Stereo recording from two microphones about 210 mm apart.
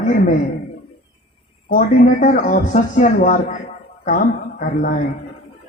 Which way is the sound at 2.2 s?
40° left (ahead or behind).